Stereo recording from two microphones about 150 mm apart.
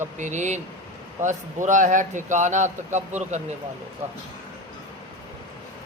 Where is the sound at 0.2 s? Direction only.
55° right (ahead or behind).